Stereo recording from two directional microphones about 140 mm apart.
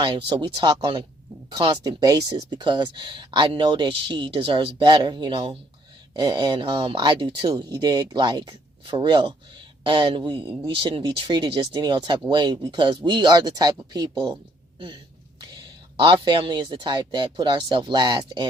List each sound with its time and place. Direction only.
0.0 s speech: 35° right (ahead or behind)
6.1 s speech: 30° right (ahead or behind)
16.0 s speech: 35° right (ahead or behind)